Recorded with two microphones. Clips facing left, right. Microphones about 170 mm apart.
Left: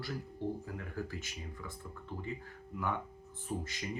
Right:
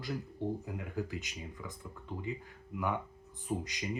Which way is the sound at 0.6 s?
15° right (ahead or behind).